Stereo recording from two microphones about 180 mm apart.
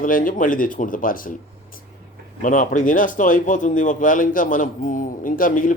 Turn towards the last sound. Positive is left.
turn(degrees=50)  # may be behind; listen again after turning